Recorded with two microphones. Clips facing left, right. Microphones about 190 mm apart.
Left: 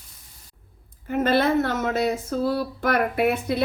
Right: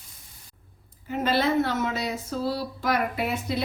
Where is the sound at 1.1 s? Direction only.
55° left (ahead or behind).